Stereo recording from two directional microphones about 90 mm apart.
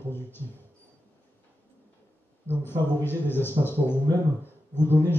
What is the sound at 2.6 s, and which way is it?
A man's voice, 25° left (ahead or behind).